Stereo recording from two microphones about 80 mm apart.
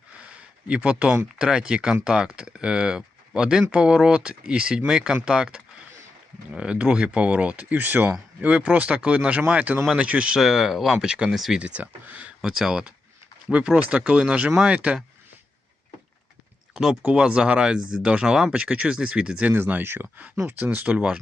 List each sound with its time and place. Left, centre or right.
0.7 s speech: centre
11.6 s speech: centre
12.4 s speech: centre
16.7 s speech: centre
17.0 s speech: centre